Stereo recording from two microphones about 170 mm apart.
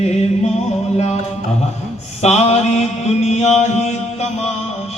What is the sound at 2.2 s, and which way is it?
Mantra, 40° left (ahead or behind).